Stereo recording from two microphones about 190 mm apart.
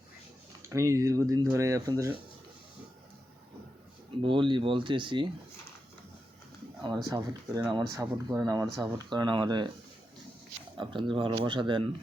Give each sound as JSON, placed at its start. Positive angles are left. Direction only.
{"t": 0.7, "sound": "speech", "side_deg": -15}
{"t": 4.2, "sound": "speech", "side_deg": -25}
{"t": 6.8, "sound": "speech", "side_deg": -20}
{"t": 10.8, "sound": "speech", "side_deg": -25}